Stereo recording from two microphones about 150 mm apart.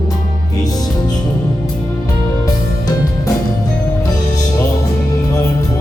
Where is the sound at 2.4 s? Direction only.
25° left (ahead or behind).